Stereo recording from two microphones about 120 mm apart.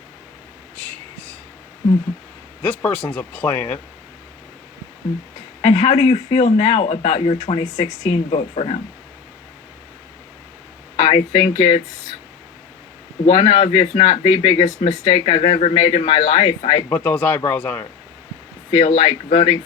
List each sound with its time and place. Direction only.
0.8 s a sound: 10° left (ahead or behind)
2.6 s speech: 10° left (ahead or behind)
5.6 s speech: 55° left (ahead or behind)
10.9 s speech: 50° left (ahead or behind)
13.2 s speech: 50° left (ahead or behind)
15.1 s speech: 60° left (ahead or behind)
16.9 s speech: 15° left (ahead or behind)
18.7 s speech: 45° left (ahead or behind)